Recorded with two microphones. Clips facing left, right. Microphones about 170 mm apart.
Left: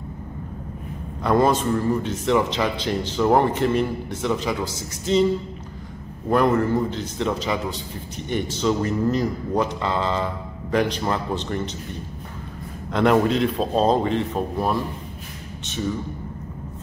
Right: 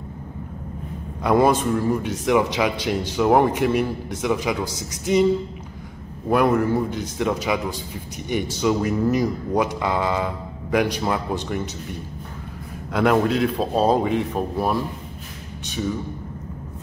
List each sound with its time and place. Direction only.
1.2 s speech: 10° right (ahead or behind)
6.2 s speech: 10° right (ahead or behind)
12.9 s a man's voice: centre (ahead or behind)